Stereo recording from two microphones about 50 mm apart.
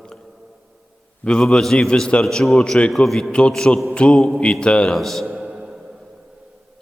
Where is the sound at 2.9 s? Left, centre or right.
Centre.